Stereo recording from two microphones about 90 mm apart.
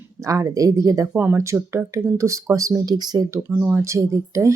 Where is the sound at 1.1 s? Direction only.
20° right (ahead or behind); by 3.2 s 45° right (ahead or behind).